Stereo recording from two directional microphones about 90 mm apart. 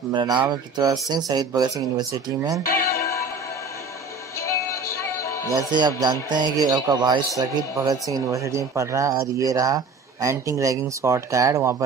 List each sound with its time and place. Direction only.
0.1 s speech: 60° right (ahead or behind)
4.4 s music: 35° left (ahead or behind)
5.7 s speech: 55° right (ahead or behind); by 11.7 s 35° right (ahead or behind)